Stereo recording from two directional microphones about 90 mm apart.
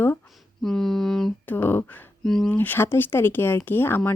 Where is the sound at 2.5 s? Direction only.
25° left (ahead or behind).